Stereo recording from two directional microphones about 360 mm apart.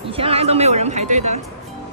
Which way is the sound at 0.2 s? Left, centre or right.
Centre.